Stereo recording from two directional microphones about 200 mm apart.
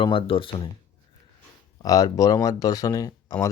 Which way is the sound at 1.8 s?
20° left (ahead or behind).